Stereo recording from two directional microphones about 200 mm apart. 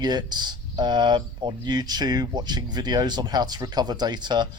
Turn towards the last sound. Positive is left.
turn(degrees=-20)  # may be behind; listen again after turning